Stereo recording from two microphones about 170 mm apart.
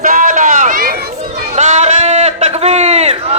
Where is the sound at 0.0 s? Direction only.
50° right (ahead or behind).